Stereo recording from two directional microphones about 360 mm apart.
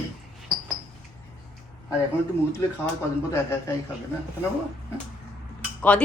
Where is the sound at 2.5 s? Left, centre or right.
Centre.